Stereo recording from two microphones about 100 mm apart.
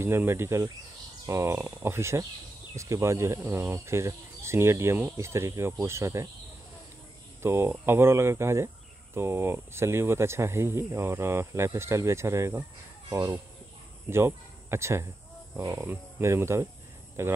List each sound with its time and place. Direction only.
0.0 s speech: 25° right (ahead or behind)
7.4 s speech: 25° right (ahead or behind)